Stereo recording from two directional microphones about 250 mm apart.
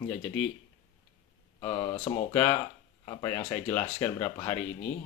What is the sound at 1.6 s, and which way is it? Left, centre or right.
Speech, centre.